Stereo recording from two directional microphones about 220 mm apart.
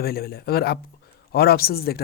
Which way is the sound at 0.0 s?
45° left (ahead or behind).